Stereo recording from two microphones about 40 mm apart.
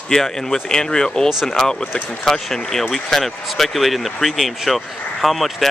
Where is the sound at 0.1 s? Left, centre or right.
Centre.